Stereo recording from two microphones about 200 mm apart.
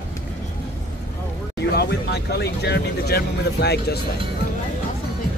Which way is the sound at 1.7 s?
55° left (ahead or behind).